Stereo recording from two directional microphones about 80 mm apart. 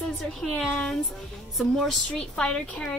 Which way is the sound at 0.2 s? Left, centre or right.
Centre.